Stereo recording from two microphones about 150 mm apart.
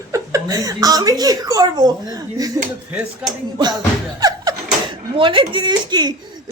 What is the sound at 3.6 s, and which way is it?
Speech, 25° right (ahead or behind).